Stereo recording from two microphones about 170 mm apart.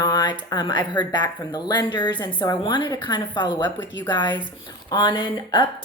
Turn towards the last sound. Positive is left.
turn(degrees=25)  # may be behind; listen again after turning